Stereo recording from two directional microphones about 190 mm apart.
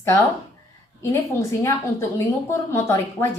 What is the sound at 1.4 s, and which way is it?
A woman's voice, 15° left (ahead or behind).